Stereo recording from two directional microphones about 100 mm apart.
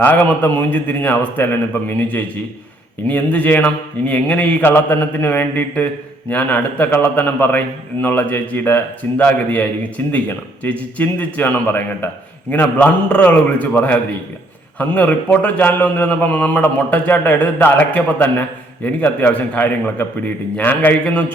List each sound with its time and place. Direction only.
0.0 s a man's voice: 15° left (ahead or behind)